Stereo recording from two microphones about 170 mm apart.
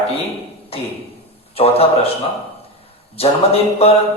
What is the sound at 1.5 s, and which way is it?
Speech, 35° left (ahead or behind).